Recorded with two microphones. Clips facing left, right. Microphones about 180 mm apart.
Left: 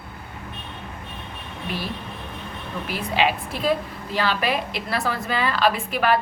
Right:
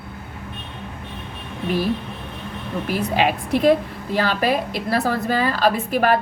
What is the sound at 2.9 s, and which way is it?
A woman's voice, 45° right (ahead or behind).